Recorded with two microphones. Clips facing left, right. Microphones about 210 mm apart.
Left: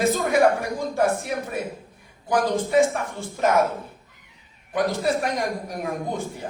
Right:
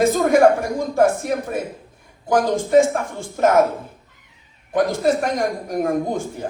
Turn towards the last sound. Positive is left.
turn(degrees=-45)  # may be behind; listen again after turning